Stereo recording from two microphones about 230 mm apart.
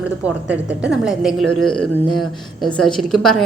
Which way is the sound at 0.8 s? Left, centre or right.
Centre.